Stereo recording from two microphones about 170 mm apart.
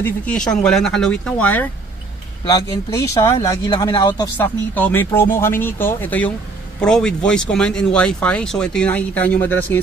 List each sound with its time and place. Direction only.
0.0 s speech: 5° left (ahead or behind)
2.4 s speech: 25° left (ahead or behind)